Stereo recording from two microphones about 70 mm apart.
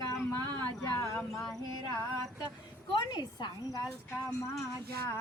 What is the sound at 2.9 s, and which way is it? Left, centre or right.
Speech, left.